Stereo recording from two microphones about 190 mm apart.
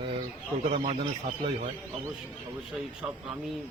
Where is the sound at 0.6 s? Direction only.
40° right (ahead or behind).